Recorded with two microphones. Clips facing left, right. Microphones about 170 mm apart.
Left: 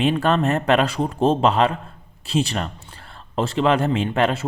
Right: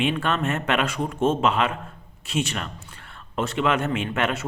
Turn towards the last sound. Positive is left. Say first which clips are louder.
# left 5 dB
turn(degrees=30)  # may be behind; listen again after turning